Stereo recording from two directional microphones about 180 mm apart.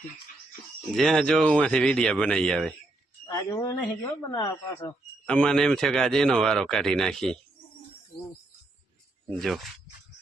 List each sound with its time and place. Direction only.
0.9 s a man's voice: 5° left (ahead or behind)
3.3 s a man's voice: 20° left (ahead or behind)
5.2 s a man's voice: 5° left (ahead or behind)
9.3 s a man's voice: centre (ahead or behind)